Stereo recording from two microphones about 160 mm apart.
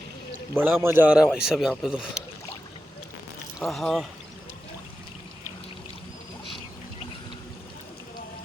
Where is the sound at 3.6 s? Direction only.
Centre (ahead or behind).